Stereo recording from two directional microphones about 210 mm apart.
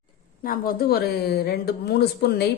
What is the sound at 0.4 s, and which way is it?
Speech, 40° left (ahead or behind).